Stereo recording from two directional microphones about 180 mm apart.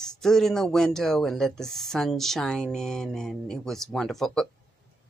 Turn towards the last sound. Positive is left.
turn(degrees=0)  # may be behind; listen again after turning